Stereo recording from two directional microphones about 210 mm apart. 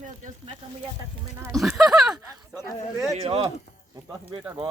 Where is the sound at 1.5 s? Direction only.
Centre (ahead or behind).